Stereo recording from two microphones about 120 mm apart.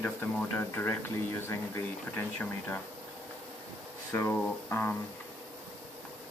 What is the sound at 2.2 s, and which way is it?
Speech, 15° left (ahead or behind).